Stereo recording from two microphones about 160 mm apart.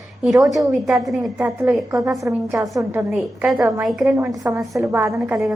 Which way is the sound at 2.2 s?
20° right (ahead or behind).